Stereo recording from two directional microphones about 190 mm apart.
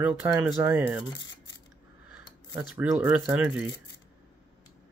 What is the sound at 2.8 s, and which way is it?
Speech, 5° right (ahead or behind).